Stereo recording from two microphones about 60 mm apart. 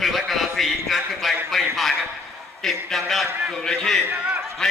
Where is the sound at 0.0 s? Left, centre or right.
Centre.